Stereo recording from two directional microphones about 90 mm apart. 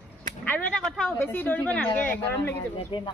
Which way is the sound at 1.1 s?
20° left (ahead or behind).